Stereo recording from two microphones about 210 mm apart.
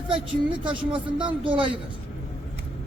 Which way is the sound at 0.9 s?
25° right (ahead or behind).